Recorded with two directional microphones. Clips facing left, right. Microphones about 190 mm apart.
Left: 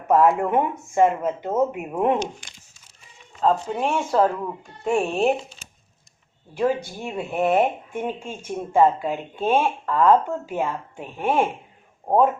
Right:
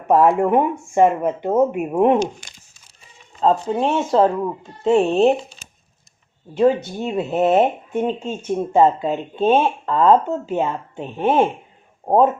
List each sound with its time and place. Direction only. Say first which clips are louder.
0.1 s speech: right 3 dB; 25° right (ahead or behind)
3.4 s speech: right 4 dB; 30° right (ahead or behind)
6.5 s speech: right 6 dB; 25° right (ahead or behind)